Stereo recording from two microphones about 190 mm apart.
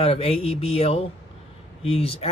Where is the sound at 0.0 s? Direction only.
30° left (ahead or behind).